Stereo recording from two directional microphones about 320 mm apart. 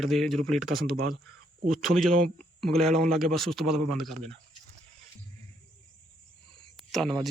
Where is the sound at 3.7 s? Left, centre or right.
Right.